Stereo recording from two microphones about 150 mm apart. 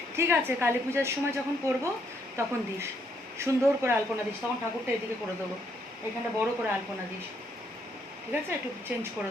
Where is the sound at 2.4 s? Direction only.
20° right (ahead or behind).